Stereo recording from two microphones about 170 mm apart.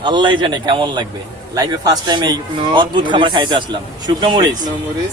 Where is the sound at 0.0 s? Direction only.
25° right (ahead or behind).